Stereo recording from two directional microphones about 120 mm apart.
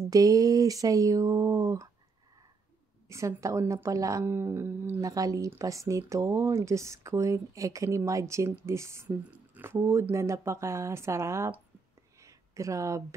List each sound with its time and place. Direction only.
0.1 s speech: 30° right (ahead or behind)
3.1 s speech: 25° right (ahead or behind)
12.2 s a sound: 25° right (ahead or behind)